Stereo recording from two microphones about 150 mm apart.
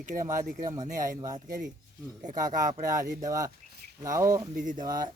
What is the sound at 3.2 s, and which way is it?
Speech, 25° right (ahead or behind).